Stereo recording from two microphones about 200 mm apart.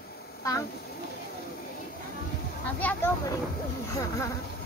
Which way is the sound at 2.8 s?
10° left (ahead or behind).